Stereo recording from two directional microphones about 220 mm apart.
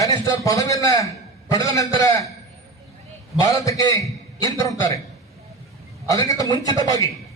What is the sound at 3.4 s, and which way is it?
A man's voice, 15° left (ahead or behind).